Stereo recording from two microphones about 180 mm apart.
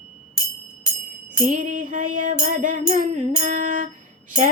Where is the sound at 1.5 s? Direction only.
45° right (ahead or behind).